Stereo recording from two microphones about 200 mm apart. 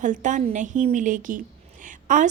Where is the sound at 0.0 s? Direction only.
40° right (ahead or behind).